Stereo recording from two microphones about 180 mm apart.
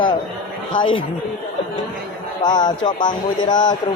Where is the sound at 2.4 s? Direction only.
25° left (ahead or behind).